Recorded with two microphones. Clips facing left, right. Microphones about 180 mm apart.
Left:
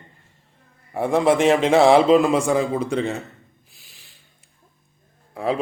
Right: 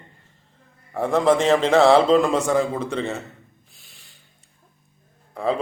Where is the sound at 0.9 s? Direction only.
10° left (ahead or behind).